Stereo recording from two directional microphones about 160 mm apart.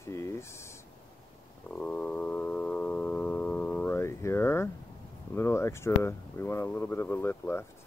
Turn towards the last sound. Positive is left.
turn(degrees=15)  # may be behind; listen again after turning